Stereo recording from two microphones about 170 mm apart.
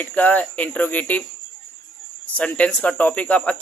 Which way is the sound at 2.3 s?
5° left (ahead or behind).